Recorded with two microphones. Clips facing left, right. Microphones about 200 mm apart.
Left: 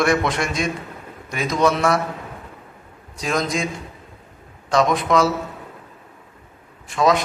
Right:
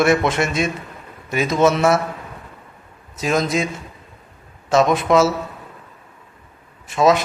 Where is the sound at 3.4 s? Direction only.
5° right (ahead or behind).